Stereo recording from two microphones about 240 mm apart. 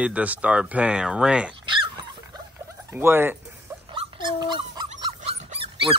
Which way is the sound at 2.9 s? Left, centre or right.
Centre.